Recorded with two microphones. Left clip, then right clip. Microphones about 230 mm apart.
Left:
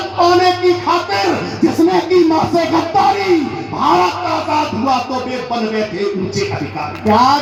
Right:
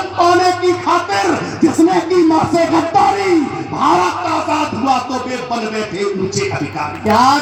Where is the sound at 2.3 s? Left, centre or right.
Right.